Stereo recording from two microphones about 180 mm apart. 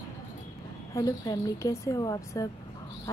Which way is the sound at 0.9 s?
20° left (ahead or behind).